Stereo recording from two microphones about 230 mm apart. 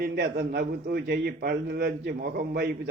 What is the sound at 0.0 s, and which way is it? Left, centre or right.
A man's voice, right.